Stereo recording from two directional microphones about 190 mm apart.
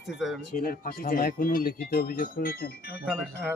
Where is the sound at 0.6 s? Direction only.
50° left (ahead or behind).